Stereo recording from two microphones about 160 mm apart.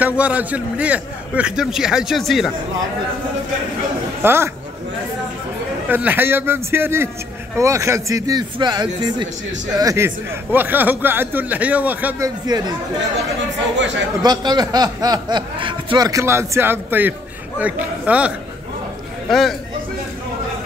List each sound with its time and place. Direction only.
0.0 s a man's voice: 10° right (ahead or behind)
4.2 s speech: 15° right (ahead or behind)
5.9 s a man's voice: 10° right (ahead or behind)
12.4 s speech: 25° right (ahead or behind)
14.2 s a man's voice: 25° right (ahead or behind); by 19.5 s centre (ahead or behind)